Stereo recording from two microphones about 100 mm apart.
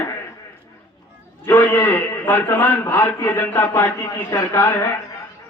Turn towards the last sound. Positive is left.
turn(degrees=25)  # may be behind; listen again after turning